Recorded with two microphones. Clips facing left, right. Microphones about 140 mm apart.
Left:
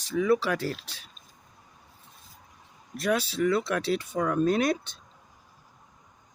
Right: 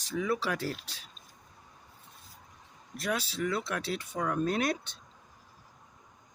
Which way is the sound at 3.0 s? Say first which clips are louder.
Left 7 dB; 70° left (ahead or behind).